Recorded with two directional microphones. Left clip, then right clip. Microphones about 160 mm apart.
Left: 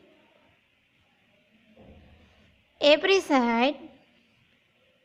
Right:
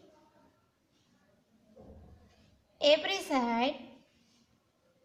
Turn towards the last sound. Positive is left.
turn(degrees=50)  # may be behind; listen again after turning